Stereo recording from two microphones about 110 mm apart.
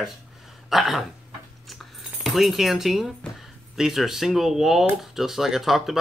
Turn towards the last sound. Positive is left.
turn(degrees=0)  # may be behind; listen again after turning